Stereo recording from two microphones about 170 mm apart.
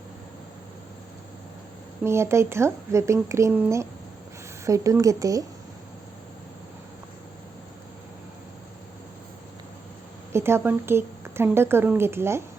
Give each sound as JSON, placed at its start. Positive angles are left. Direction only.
{"t": 2.0, "sound": "speech", "side_deg": -15}
{"t": 4.6, "sound": "speech", "side_deg": -20}
{"t": 10.3, "sound": "speech", "side_deg": -15}